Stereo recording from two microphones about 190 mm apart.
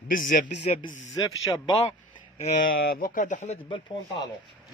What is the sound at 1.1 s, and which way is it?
Speech, 20° left (ahead or behind).